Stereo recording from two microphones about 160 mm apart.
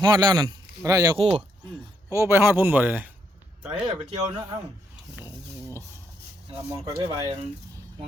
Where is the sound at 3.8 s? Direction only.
30° right (ahead or behind).